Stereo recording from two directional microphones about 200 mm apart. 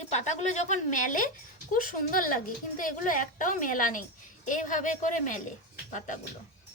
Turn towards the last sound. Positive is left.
turn(degrees=40)  # may be behind; listen again after turning